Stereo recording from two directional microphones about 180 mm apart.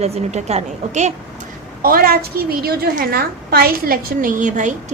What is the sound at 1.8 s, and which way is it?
A woman's voice, 55° right (ahead or behind).